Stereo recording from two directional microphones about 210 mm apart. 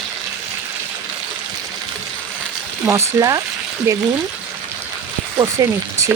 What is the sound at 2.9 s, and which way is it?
Speech, 15° right (ahead or behind).